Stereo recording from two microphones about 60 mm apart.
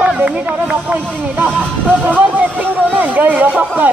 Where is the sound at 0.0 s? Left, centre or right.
Right.